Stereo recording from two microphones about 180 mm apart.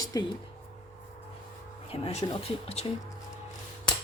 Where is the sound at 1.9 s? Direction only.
35° left (ahead or behind).